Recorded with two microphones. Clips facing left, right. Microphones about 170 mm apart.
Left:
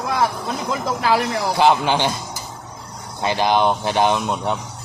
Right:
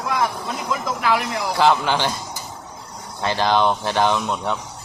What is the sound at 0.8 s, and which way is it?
Speech, 30° left (ahead or behind).